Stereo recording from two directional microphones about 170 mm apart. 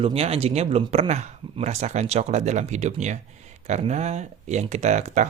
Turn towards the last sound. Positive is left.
turn(degrees=-45)  # may be behind; listen again after turning